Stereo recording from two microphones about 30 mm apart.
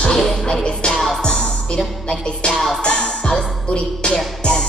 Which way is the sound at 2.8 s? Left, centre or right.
Left.